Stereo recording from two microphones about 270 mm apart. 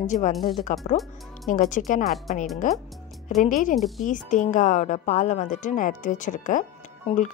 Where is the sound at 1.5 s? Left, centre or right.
Left.